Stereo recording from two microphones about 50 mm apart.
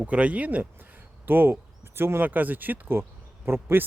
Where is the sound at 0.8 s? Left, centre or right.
Right.